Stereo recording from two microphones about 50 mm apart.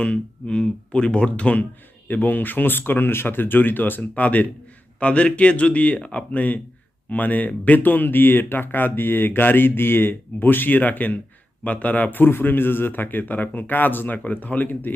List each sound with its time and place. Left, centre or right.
0.0 s speech: left
2.0 s speech: left
12.2 s speech: left